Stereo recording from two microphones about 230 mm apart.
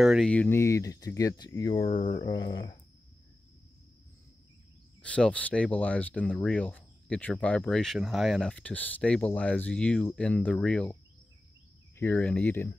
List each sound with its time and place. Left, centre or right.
0.0 s speech: centre
5.0 s speech: centre
12.0 s speech: centre